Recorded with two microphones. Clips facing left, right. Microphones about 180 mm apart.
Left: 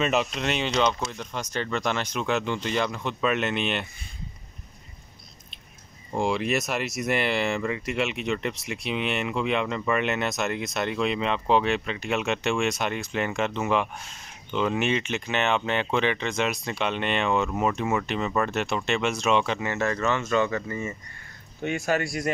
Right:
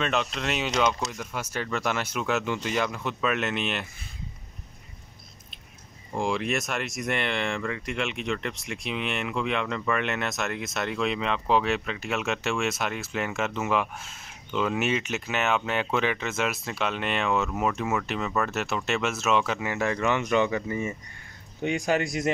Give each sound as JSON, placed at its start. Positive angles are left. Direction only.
{"t": 0.0, "sound": "speech", "side_deg": 5}
{"t": 6.1, "sound": "speech", "side_deg": 0}